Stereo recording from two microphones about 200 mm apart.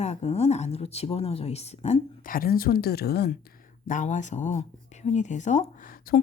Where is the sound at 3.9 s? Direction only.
40° left (ahead or behind).